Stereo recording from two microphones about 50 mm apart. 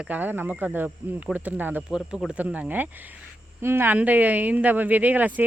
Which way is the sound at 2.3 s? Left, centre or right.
Right.